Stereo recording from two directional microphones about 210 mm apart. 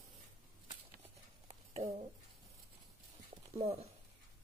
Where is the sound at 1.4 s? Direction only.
30° right (ahead or behind).